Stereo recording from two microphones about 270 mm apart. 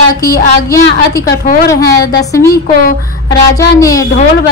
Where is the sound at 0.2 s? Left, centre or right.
Centre.